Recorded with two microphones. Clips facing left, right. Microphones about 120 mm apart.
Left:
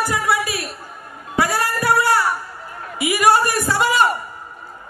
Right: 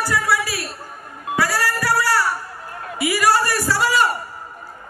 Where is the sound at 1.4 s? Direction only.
20° left (ahead or behind).